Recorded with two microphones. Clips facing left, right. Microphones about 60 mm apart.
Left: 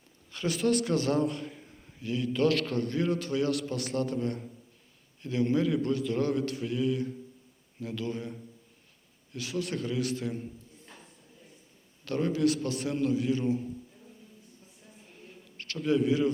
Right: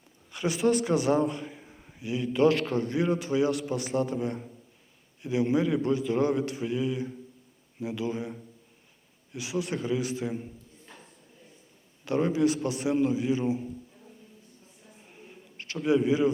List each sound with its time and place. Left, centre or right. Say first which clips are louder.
0.3 s a man's voice: right 2 dB; centre
9.3 s a man's voice: right 2 dB; centre
12.0 s a man's voice: right 2 dB; centre
15.0 s a sound: right 2 dB; centre
16.0 s a man's voice: right 1 dB; centre